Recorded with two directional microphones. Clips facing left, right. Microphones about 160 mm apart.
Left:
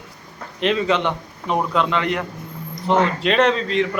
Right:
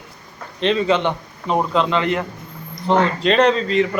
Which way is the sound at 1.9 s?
Centre (ahead or behind).